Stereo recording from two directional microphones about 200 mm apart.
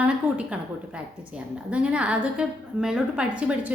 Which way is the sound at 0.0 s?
5° right (ahead or behind).